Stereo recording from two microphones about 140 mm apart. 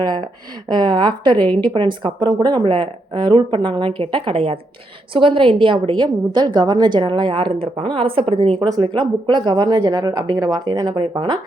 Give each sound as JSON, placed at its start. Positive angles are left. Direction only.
{"t": 0.0, "sound": "speech", "side_deg": -30}
{"t": 8.6, "sound": "speech", "side_deg": -30}